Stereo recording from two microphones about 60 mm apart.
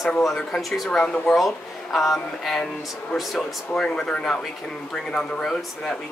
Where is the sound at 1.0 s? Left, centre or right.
Centre.